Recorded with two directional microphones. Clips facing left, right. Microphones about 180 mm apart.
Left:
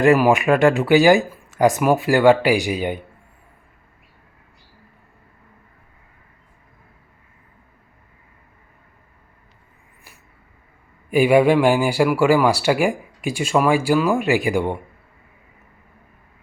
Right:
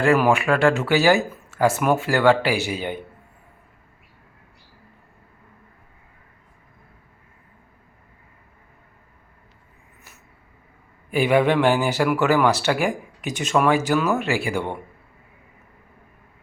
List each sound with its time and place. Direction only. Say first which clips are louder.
0.0 s speech: left 3 dB; 15° left (ahead or behind)
11.1 s speech: left 4 dB; 10° left (ahead or behind)